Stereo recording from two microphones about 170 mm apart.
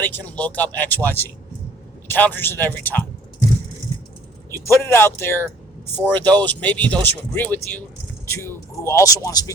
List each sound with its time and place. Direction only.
0.0 s speech: 10° left (ahead or behind)
4.6 s speech: 15° left (ahead or behind)